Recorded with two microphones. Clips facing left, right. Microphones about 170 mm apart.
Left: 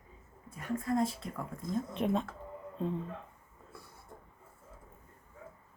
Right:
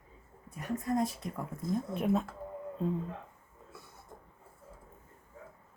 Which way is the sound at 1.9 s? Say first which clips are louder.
Right 1 dB; 5° right (ahead or behind).